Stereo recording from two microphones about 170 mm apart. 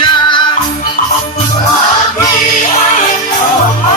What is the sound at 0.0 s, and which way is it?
Music, 25° left (ahead or behind).